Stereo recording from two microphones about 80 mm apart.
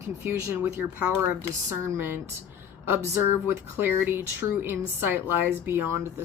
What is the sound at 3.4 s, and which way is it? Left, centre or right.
A woman's voice, right.